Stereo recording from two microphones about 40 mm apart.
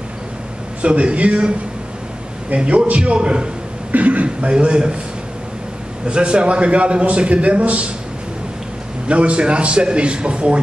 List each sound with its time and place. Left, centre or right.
0.8 s a man's voice: right
2.5 s a man's voice: right
3.9 s a man's voice: right
4.5 s a man's voice: right
6.0 s a man's voice: right
9.0 s a man's voice: right